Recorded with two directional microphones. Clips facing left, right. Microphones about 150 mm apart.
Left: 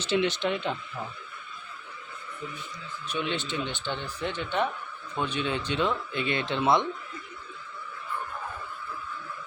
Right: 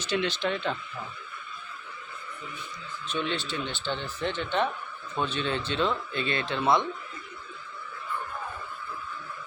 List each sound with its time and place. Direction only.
0.1 s speech: 20° left (ahead or behind)
3.1 s speech: 15° left (ahead or behind)